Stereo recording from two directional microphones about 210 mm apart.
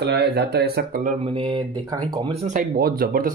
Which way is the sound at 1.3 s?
25° right (ahead or behind).